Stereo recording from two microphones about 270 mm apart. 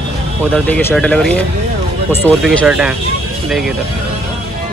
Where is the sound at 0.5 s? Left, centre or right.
Centre.